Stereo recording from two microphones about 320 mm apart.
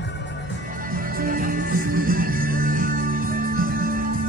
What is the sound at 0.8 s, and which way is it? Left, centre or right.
Music, right.